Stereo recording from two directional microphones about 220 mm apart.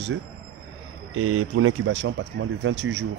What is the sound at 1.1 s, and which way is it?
Speech, 75° right (ahead or behind).